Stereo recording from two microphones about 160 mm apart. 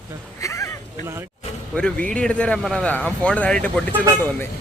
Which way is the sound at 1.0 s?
15° right (ahead or behind).